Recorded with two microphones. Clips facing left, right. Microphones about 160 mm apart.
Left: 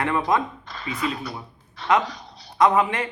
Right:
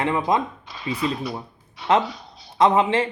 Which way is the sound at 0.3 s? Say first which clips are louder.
Right 1 dB; 15° right (ahead or behind).